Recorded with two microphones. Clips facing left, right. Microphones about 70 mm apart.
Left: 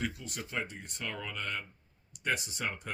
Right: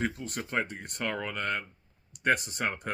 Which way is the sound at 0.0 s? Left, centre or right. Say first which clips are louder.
Right 5 dB; right.